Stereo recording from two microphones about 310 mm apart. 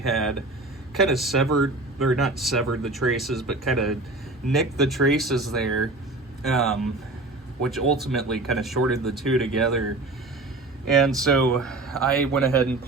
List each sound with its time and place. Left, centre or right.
0.1 s speech: centre
1.5 s speech: right
2.2 s speech: centre
3.4 s a man's voice: right
3.7 s speech: centre
10.8 s speech: centre